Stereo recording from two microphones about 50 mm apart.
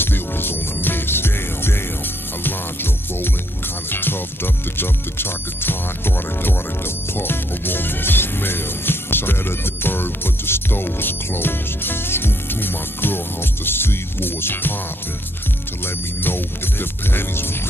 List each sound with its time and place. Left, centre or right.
0.0 s music: left
15.8 s music: left